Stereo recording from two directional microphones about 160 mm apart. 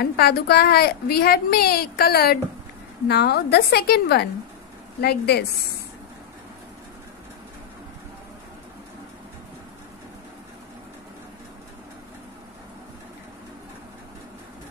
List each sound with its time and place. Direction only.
0.0 s a woman's voice: 80° left
3.1 s a woman's voice: 90° left